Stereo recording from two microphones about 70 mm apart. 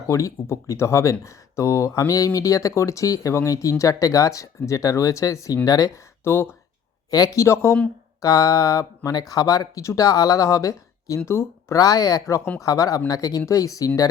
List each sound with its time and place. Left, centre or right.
0.1 s speech: left
6.2 s speech: left
8.2 s speech: left
11.3 s speech: left
11.8 s speech: left